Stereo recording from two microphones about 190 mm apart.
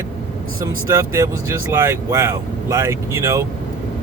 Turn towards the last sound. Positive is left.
turn(degrees=-15)  # may be behind; listen again after turning